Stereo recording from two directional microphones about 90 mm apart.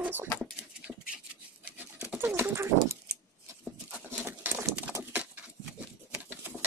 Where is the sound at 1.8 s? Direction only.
20° right (ahead or behind).